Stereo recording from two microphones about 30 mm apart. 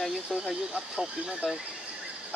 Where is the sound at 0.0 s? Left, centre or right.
Centre.